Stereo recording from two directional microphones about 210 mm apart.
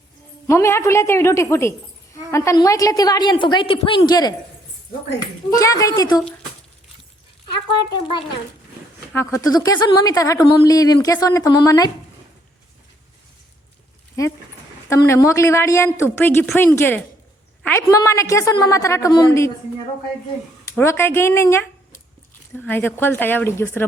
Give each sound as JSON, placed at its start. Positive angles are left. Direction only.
{"t": 0.4, "sound": "a woman's voice", "side_deg": 15}
{"t": 5.5, "sound": "a woman's voice", "side_deg": 15}
{"t": 9.1, "sound": "a woman's voice", "side_deg": 15}
{"t": 14.8, "sound": "a woman's voice", "side_deg": 15}
{"t": 20.7, "sound": "a woman's voice", "side_deg": 10}